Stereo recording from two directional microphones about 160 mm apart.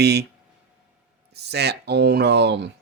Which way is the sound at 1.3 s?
90° right.